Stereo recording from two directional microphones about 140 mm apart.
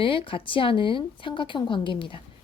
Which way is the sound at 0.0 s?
40° left (ahead or behind).